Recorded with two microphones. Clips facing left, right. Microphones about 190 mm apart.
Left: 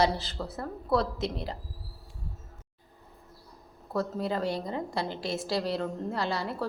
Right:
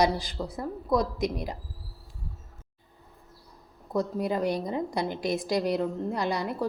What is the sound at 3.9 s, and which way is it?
A woman's voice, 15° right (ahead or behind).